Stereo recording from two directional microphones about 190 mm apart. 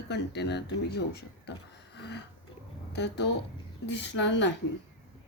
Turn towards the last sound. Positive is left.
turn(degrees=70)  # may be behind; listen again after turning